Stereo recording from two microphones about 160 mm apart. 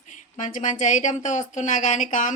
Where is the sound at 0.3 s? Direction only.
50° left (ahead or behind).